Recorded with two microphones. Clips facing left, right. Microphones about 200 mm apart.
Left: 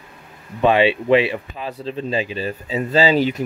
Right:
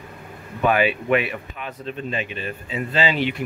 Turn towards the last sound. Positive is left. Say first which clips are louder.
# left 6 dB
turn(degrees=40)  # may be behind; listen again after turning